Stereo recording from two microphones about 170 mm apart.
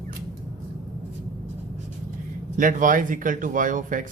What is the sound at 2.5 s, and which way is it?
Speech, 50° right (ahead or behind).